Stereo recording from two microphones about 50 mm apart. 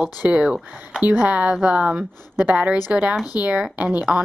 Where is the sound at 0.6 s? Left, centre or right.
Right.